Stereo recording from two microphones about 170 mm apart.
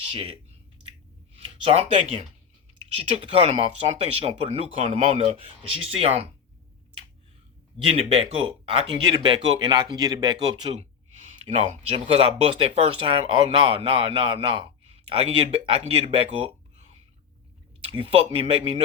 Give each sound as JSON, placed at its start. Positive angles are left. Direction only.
{"t": 0.1, "sound": "speech", "side_deg": -30}
{"t": 1.4, "sound": "speech", "side_deg": -35}
{"t": 7.9, "sound": "speech", "side_deg": -35}
{"t": 17.9, "sound": "speech", "side_deg": -35}